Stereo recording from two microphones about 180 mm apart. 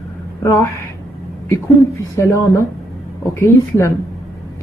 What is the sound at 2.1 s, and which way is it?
A woman's voice, 15° left (ahead or behind).